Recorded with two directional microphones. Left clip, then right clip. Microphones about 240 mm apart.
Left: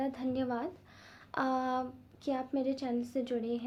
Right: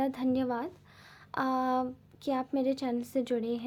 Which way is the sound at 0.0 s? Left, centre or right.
Right.